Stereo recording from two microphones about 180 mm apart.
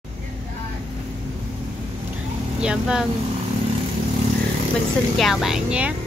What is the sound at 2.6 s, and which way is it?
Speech, 5° right (ahead or behind).